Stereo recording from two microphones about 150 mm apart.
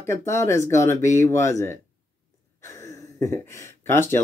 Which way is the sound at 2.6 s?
20° left (ahead or behind).